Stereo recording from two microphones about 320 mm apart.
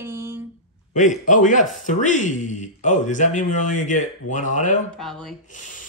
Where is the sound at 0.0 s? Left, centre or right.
Centre.